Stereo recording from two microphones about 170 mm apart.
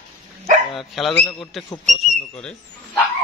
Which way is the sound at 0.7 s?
Centre (ahead or behind).